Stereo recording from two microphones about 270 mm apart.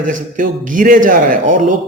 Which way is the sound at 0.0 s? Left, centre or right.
Right.